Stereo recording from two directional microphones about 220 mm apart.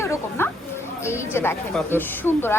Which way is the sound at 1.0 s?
10° left (ahead or behind).